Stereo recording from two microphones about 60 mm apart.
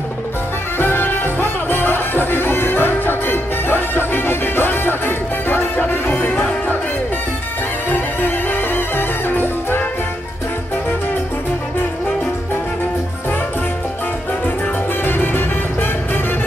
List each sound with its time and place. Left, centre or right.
0.7 s music: left
6.1 s music: left
7.9 s music: left
15.0 s music: left